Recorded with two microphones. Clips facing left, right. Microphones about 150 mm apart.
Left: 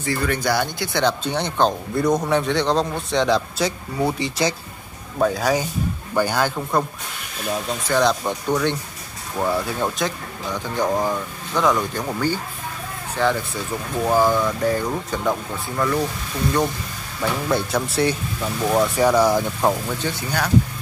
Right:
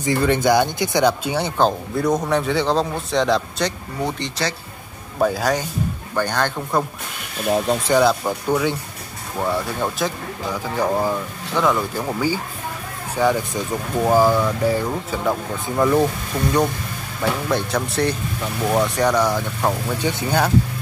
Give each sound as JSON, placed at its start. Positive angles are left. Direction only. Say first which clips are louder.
{"t": 0.0, "sound": "speech", "louder": "right 5 dB", "side_deg": -20}
{"t": 5.2, "sound": "a man's voice", "louder": "even", "side_deg": 0}
{"t": 7.4, "sound": "speech", "louder": "right 6 dB", "side_deg": -35}
{"t": 7.9, "sound": "speech", "louder": "right 1 dB", "side_deg": -5}
{"t": 15.6, "sound": "speech", "louder": "right 6 dB", "side_deg": -20}
{"t": 17.5, "sound": "speech", "louder": "even", "side_deg": 0}
{"t": 20.0, "sound": "speech", "louder": "right 5 dB", "side_deg": -20}